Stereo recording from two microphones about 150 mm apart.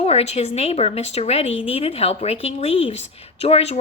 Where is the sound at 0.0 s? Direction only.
45° left (ahead or behind).